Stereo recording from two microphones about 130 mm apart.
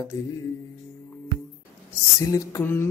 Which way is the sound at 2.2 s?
25° left (ahead or behind).